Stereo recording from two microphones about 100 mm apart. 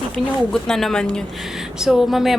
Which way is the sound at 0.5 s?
5° left (ahead or behind).